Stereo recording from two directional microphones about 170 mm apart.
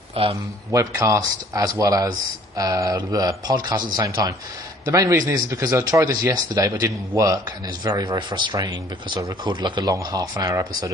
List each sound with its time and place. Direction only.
0.2 s speech: 35° right (ahead or behind)
0.7 s speech: 20° right (ahead or behind)